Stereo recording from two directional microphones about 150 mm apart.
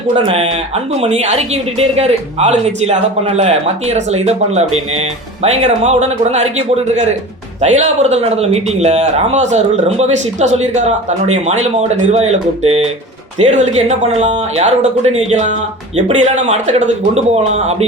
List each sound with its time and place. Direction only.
0.9 s speech: 45° right (ahead or behind)